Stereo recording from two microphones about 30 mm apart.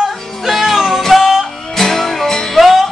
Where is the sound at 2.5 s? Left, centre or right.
Centre.